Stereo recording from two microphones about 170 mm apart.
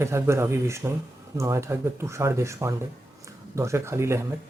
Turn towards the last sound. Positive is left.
turn(degrees=-15)  # may be behind; listen again after turning